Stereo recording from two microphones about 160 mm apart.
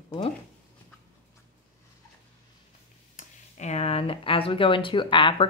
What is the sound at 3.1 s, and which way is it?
Speech, 45° left (ahead or behind).